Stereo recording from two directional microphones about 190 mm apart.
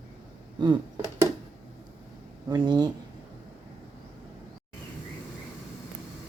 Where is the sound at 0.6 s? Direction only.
20° right (ahead or behind).